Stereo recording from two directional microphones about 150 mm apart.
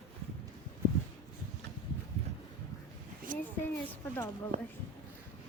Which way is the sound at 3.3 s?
65° right (ahead or behind).